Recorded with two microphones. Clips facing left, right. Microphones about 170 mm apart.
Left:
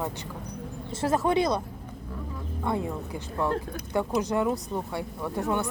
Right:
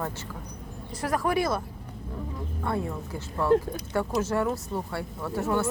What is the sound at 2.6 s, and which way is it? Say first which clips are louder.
A woman's voice: left 1 dB; 15° left (ahead or behind).